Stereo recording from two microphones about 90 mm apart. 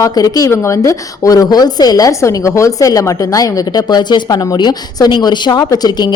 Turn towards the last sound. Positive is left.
turn(degrees=45)  # may be behind; listen again after turning